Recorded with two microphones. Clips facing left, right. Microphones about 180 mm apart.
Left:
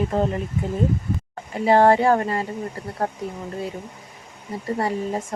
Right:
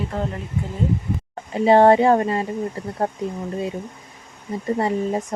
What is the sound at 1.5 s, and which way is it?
Speech, 25° right (ahead or behind).